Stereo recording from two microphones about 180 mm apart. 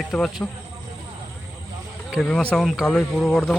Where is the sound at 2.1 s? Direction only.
5° left (ahead or behind).